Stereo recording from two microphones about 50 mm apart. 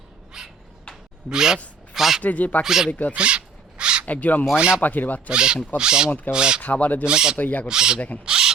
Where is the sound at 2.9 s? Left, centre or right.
Left.